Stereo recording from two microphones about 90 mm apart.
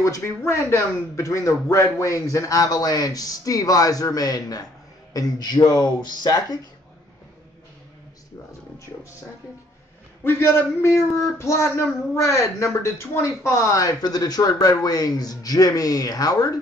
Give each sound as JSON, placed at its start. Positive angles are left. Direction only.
{"t": 0.4, "sound": "speech", "side_deg": 30}
{"t": 10.2, "sound": "speech", "side_deg": 30}